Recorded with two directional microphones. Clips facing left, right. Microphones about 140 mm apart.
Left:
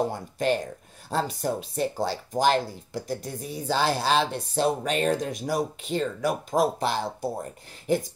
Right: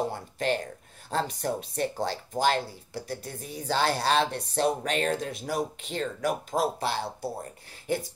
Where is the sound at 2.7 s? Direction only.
45° left (ahead or behind).